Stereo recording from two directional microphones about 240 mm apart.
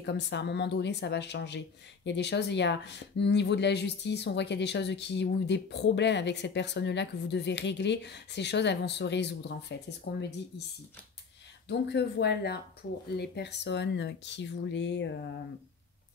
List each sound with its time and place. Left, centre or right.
0.0 s speech: left
11.6 s speech: left